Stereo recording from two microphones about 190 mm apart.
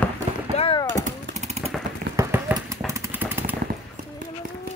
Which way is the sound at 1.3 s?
35° right (ahead or behind).